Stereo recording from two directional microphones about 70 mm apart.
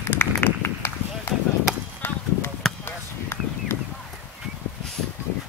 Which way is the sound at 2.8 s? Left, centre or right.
Left.